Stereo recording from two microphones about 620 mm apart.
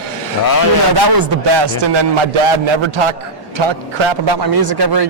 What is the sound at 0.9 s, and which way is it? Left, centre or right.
A man's voice, right.